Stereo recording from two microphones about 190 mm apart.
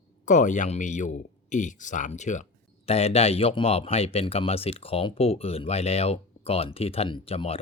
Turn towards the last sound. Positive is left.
turn(degrees=30)  # may be behind; listen again after turning